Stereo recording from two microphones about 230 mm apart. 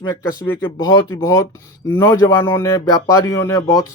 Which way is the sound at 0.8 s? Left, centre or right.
Centre.